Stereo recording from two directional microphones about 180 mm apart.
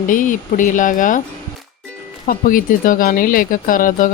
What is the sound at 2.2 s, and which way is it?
Speech, 50° left (ahead or behind).